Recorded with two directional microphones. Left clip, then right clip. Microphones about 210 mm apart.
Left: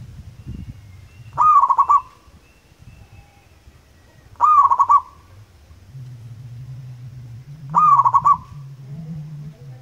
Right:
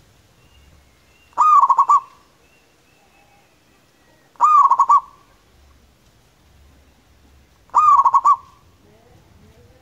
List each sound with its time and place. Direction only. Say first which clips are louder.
1.3 s goose: right 1 dB; 10° right (ahead or behind)
4.4 s bird: right 1 dB; 5° right (ahead or behind)
7.7 s goose: right 1 dB; 5° right (ahead or behind)